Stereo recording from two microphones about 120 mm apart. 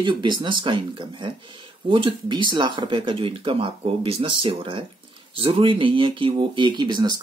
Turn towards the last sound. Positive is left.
turn(degrees=-35)  # may be behind; listen again after turning